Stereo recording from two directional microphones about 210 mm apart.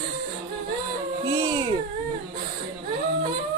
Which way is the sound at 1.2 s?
20° right (ahead or behind).